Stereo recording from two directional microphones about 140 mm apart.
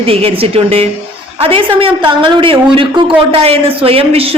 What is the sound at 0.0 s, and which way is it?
A woman's voice, 45° right (ahead or behind).